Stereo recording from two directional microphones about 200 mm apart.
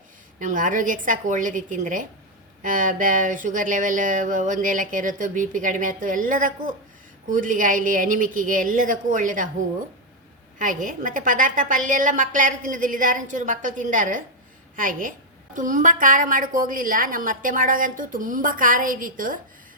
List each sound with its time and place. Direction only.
0.3 s speech: 40° right (ahead or behind)
10.6 s a woman's voice: 40° right (ahead or behind)